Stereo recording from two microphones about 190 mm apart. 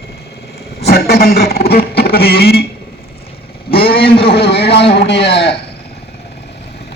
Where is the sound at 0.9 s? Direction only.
55° left (ahead or behind).